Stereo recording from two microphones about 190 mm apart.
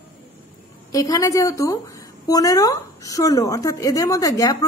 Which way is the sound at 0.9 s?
20° left (ahead or behind).